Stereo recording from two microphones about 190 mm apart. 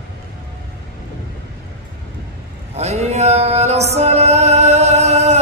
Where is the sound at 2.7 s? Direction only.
35° right (ahead or behind).